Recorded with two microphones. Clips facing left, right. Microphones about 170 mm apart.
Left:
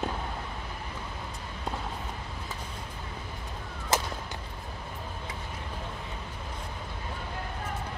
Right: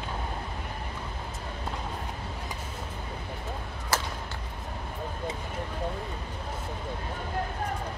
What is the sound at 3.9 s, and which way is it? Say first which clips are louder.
Whip: left 2 dB; 20° left (ahead or behind).